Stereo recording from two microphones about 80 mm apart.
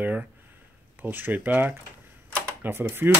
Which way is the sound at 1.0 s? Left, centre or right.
Right.